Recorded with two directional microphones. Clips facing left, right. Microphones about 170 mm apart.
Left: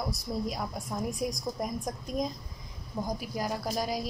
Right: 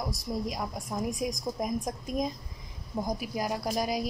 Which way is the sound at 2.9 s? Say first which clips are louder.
Right 2 dB; 15° right (ahead or behind).